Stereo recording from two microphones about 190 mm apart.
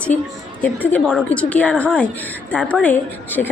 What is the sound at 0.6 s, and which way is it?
A woman's voice, 10° left (ahead or behind).